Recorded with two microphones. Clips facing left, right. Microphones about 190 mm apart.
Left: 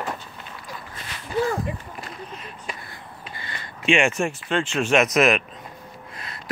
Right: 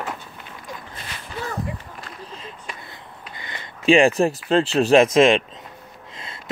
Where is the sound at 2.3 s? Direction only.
30° right (ahead or behind).